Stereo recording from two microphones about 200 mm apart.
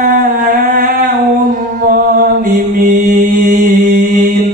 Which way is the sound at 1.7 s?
45° right (ahead or behind).